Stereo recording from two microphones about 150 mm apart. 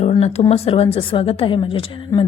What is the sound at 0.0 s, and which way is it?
Speech, 45° left (ahead or behind).